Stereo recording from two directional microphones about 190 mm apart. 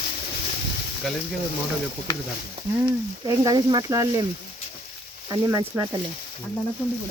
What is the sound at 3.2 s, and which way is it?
Speech, 20° right (ahead or behind).